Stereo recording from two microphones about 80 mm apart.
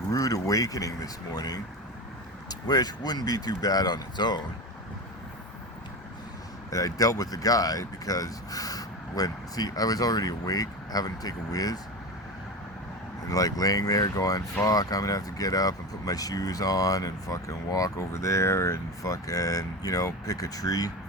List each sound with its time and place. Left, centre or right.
0.1 s speech: left
6.7 s speech: left
13.3 s speech: left